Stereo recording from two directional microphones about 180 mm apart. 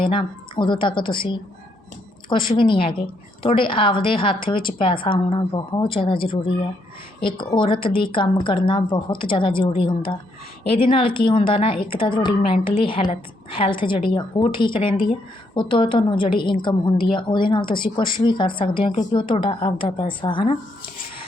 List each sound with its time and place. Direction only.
0.0 s a woman's voice: 30° left (ahead or behind)
2.6 s a woman's voice: 30° left (ahead or behind)